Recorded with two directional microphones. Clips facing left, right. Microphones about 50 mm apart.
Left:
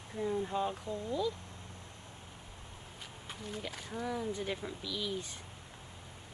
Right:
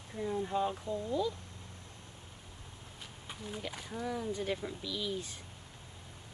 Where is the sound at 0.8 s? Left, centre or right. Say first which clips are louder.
Right 1 dB; centre.